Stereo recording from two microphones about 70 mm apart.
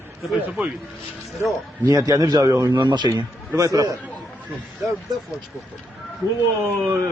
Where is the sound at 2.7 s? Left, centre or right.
Right.